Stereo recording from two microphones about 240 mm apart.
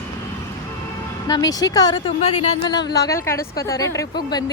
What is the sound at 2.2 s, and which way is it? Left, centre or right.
A woman's voice, left.